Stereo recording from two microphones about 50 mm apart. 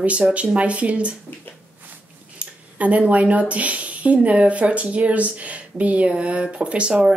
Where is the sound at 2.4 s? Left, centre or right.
Right.